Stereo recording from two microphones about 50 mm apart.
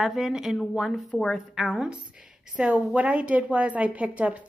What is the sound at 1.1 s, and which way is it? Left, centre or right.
Speech, centre.